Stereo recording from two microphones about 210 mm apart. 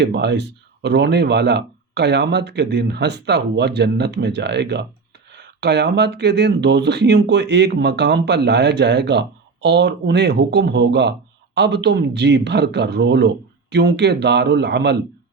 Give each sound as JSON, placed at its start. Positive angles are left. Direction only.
{"t": 0.0, "sound": "speech", "side_deg": -55}